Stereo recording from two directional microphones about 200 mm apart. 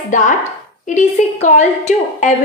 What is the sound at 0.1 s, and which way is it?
A woman's voice, 40° left (ahead or behind).